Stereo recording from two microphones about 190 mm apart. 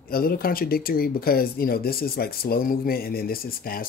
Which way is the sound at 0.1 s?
50° left (ahead or behind).